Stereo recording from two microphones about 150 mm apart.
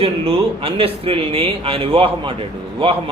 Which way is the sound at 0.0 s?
40° right (ahead or behind).